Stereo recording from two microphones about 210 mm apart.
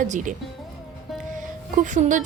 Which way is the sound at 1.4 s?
35° right (ahead or behind).